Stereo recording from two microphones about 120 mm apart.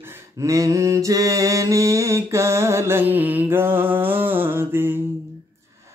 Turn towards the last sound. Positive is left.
turn(degrees=-20)  # may be behind; listen again after turning